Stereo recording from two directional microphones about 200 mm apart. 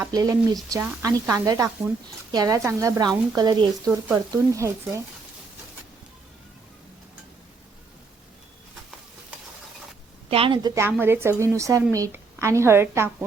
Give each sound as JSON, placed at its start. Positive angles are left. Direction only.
{"t": 0.0, "sound": "a woman's voice", "side_deg": -15}
{"t": 10.2, "sound": "a woman's voice", "side_deg": -30}
{"t": 10.8, "sound": "a woman's voice", "side_deg": -10}